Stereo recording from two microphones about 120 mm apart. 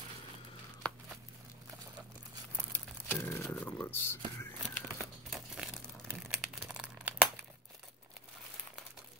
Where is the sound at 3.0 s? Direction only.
20° left (ahead or behind).